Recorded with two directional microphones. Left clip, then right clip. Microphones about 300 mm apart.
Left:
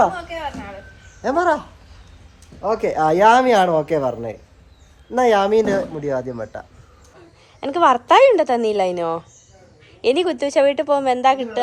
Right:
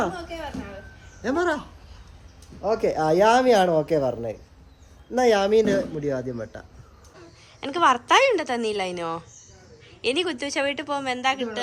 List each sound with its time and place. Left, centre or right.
1.2 s a woman's voice: centre
2.6 s speech: left
7.6 s a woman's voice: centre